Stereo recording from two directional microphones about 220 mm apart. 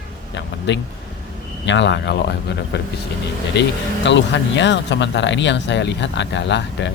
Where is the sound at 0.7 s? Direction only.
55° left (ahead or behind).